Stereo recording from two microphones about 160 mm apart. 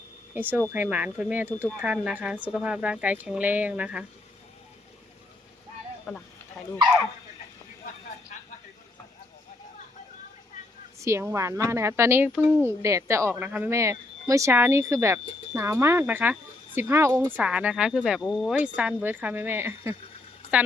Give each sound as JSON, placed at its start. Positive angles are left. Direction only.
{"t": 0.3, "sound": "speech", "side_deg": -10}
{"t": 8.3, "sound": "vehicle", "side_deg": 50}
{"t": 11.0, "sound": "speech", "side_deg": -15}